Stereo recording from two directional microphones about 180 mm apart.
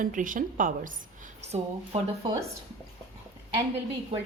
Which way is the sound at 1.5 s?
35° right (ahead or behind).